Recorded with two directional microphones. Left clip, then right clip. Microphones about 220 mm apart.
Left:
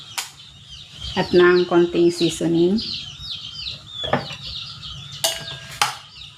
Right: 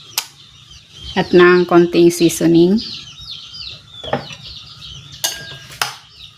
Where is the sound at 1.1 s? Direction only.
50° right (ahead or behind).